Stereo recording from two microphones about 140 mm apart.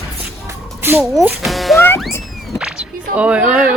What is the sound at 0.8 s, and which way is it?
Speech, 15° right (ahead or behind).